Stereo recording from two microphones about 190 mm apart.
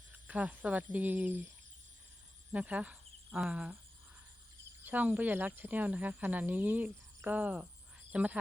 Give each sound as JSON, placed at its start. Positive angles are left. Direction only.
{"t": 0.3, "sound": "speech", "side_deg": -5}
{"t": 2.5, "sound": "speech", "side_deg": -5}
{"t": 4.9, "sound": "speech", "side_deg": -10}